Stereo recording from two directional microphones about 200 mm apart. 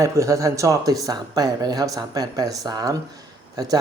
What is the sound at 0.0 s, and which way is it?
Speech, 15° right (ahead or behind).